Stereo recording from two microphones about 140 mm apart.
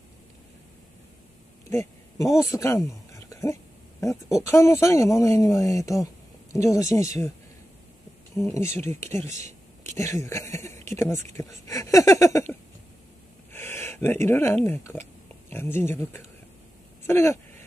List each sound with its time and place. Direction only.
1.7 s a sound: 20° left (ahead or behind)
2.4 s speech: 20° left (ahead or behind)
8.4 s speech: 20° left (ahead or behind)